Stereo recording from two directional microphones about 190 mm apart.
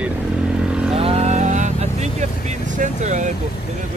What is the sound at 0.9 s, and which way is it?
Vehicle, 30° right (ahead or behind).